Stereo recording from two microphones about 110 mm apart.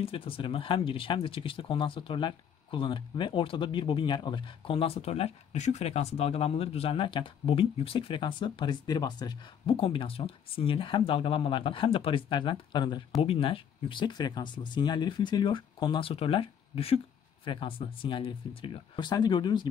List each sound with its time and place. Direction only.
0.0 s speech: 55° left (ahead or behind); by 9.4 s 40° left (ahead or behind)
9.7 s speech: 55° left (ahead or behind)
13.2 s speech: 55° left (ahead or behind)